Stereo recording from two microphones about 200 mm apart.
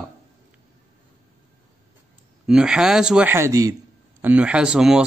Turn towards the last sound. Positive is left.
turn(degrees=-5)  # may be behind; listen again after turning